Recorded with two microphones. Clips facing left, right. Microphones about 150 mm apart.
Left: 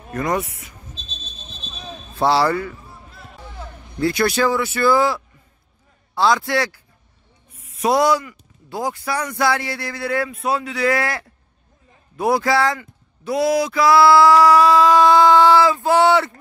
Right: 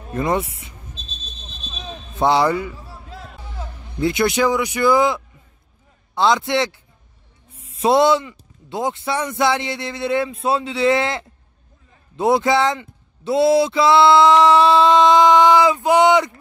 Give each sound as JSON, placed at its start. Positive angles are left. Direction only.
{"t": 0.1, "sound": "speech", "side_deg": -25}
{"t": 2.1, "sound": "speech", "side_deg": -20}
{"t": 2.9, "sound": "music", "side_deg": -90}
{"t": 4.0, "sound": "speech", "side_deg": -20}